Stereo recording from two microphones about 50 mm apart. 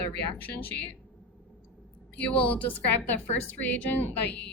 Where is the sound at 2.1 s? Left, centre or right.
Left.